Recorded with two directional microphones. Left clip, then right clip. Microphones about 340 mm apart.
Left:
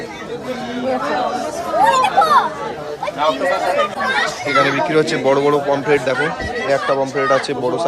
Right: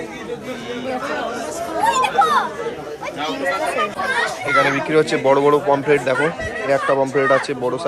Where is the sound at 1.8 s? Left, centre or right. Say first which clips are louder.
Left 3 dB; centre.